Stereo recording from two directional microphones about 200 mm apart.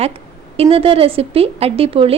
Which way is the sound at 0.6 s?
30° right (ahead or behind).